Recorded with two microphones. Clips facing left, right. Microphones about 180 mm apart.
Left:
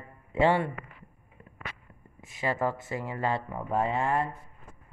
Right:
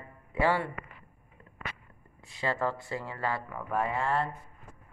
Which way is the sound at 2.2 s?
15° left (ahead or behind).